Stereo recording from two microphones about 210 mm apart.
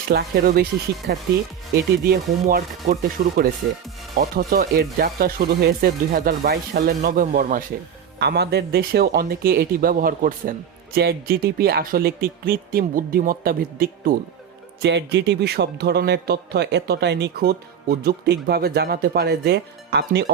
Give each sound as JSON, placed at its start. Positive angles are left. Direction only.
{"t": 0.1, "sound": "speech", "side_deg": -50}
{"t": 14.8, "sound": "speech", "side_deg": -55}